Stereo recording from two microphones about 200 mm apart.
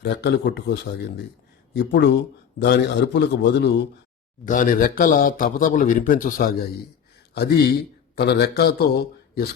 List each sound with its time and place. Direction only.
0.0 s speech: 60° left (ahead or behind)
4.4 s a man's voice: 40° left (ahead or behind)
7.3 s a man's voice: 55° left (ahead or behind)